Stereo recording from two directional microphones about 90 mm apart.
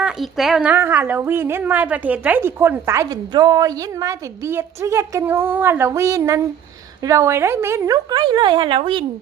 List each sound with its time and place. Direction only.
0.0 s speech: 5° right (ahead or behind)
0.6 s a woman's voice: 20° right (ahead or behind)
2.6 s a woman's voice: 30° right (ahead or behind)
3.3 s a woman's voice: 50° right (ahead or behind); by 7.9 s 30° right (ahead or behind)
7.9 s speech: 55° right (ahead or behind); by 9.0 s 70° right (ahead or behind)